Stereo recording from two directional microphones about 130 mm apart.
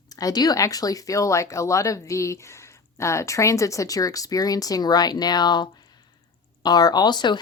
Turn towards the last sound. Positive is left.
turn(degrees=35)  # may be behind; listen again after turning